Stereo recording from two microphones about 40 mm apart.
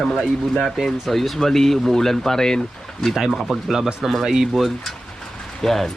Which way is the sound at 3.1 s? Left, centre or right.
Centre.